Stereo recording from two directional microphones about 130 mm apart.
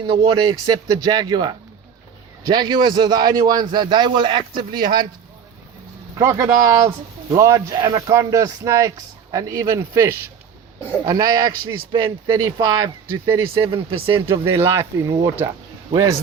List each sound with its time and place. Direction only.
0.0 s a man's voice: 40° right (ahead or behind)
6.1 s a man's voice: 20° right (ahead or behind)
13.2 s a man's voice: 20° right (ahead or behind)
13.6 s a man's voice: 40° right (ahead or behind)
14.3 s a man's voice: 20° right (ahead or behind)